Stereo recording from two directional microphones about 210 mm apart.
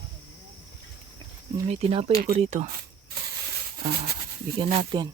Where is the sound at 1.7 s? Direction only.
30° right (ahead or behind).